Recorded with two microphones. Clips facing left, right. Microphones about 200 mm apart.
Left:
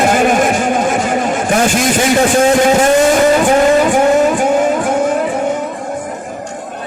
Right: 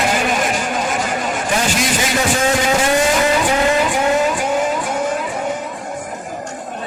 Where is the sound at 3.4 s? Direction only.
50° left (ahead or behind).